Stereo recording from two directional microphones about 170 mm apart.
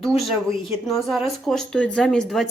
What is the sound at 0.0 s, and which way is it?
Speech, centre (ahead or behind).